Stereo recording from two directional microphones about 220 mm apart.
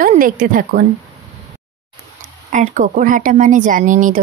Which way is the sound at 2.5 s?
35° right (ahead or behind).